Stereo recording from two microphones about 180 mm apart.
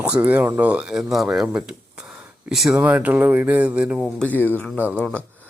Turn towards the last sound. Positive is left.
turn(degrees=5)  # may be behind; listen again after turning